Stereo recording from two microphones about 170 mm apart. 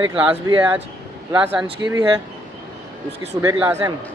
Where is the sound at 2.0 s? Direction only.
25° right (ahead or behind).